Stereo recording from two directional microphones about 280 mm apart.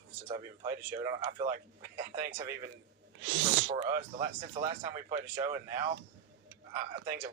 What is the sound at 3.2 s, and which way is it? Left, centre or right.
Speech, right.